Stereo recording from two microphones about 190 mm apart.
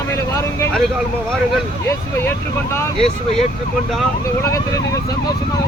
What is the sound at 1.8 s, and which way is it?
Speech, 15° left (ahead or behind).